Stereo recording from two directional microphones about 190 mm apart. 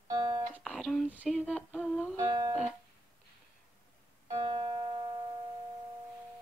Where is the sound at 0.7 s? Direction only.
Centre (ahead or behind).